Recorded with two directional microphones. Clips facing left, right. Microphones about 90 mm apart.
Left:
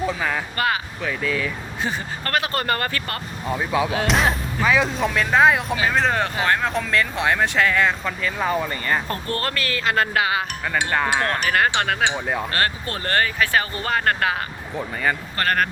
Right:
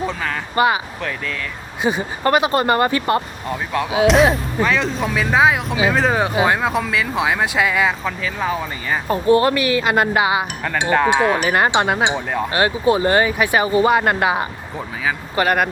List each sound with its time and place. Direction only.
0.1 s speech: 5° left (ahead or behind)
0.5 s speech: 20° right (ahead or behind)
1.0 s speech: 5° left (ahead or behind)
1.8 s speech: 15° right (ahead or behind)
3.5 s speech: centre (ahead or behind)
9.1 s speech: 15° right (ahead or behind)
11.2 s speech: 5° right (ahead or behind)
11.4 s speech: 20° right (ahead or behind)